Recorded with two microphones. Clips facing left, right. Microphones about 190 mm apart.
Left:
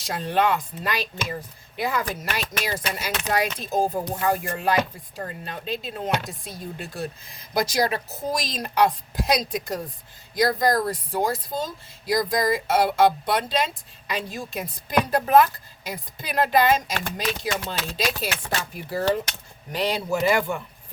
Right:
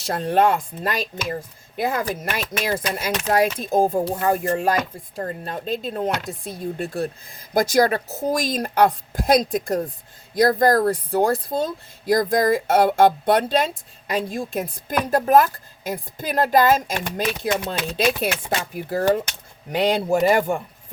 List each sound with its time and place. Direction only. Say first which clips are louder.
0.1 s speech: right 4 dB; 50° right (ahead or behind)
20.1 s speech: right 2 dB; 45° right (ahead or behind)